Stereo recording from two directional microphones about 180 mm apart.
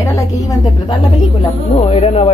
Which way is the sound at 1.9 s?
35° left (ahead or behind).